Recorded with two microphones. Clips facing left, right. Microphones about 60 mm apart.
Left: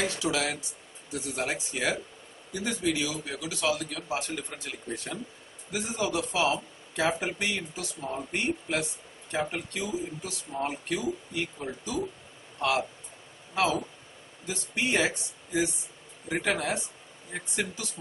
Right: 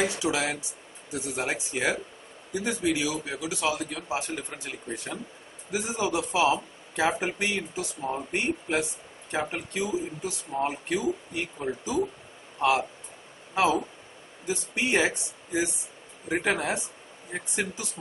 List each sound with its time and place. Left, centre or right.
0.0 s a man's voice: centre
13.6 s a man's voice: centre